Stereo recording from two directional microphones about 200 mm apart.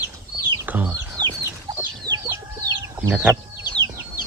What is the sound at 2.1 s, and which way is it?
Chicken, 15° right (ahead or behind).